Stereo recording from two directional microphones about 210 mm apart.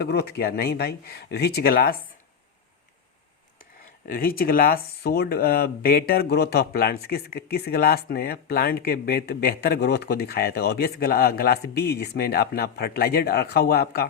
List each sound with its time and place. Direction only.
0.0 s speech: 50° left (ahead or behind)
4.0 s speech: 45° left (ahead or behind)